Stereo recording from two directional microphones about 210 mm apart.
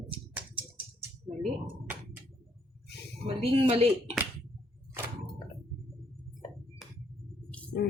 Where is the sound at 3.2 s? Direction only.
25° right (ahead or behind).